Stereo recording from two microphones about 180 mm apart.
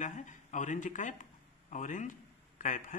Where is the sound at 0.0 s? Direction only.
45° left (ahead or behind).